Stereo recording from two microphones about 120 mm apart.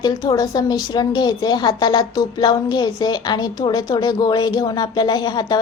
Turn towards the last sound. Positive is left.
turn(degrees=35)  # may be behind; listen again after turning